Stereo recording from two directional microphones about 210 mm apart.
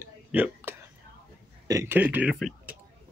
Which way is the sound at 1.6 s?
15° right (ahead or behind).